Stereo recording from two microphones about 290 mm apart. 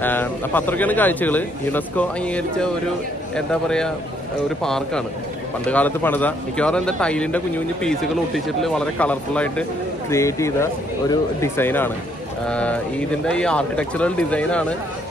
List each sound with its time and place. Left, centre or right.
0.0 s a man's voice: centre